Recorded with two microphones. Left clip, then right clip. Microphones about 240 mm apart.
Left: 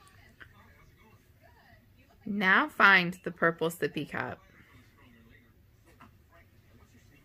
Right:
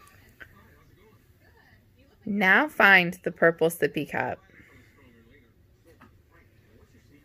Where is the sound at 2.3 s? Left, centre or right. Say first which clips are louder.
Right 4 dB; right.